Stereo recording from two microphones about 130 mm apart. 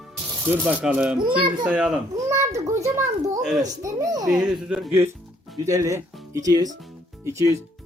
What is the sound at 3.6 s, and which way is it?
Speech, 25° right (ahead or behind).